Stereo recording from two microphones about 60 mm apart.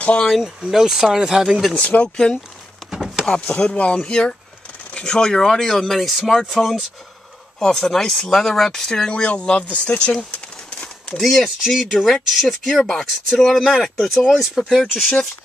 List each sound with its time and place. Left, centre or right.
0.0 s speech: left
0.6 s speech: centre
1.8 s speech: left
2.9 s a sound: centre
3.3 s speech: centre
3.5 s speech: centre
10.3 s bird: left
11.1 s speech: centre